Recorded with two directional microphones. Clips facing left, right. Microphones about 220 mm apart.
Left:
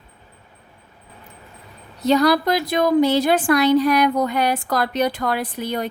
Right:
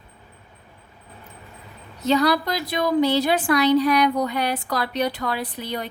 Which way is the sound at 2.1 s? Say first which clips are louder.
Left 4 dB; 45° left (ahead or behind).